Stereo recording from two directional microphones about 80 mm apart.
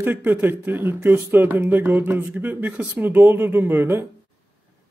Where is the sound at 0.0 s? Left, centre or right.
Right.